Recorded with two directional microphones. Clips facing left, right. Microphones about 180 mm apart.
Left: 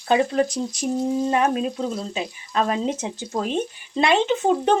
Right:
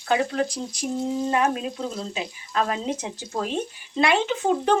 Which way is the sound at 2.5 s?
25° left (ahead or behind).